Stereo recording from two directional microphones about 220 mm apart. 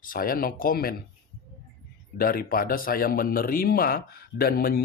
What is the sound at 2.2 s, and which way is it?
Speech, 40° left (ahead or behind).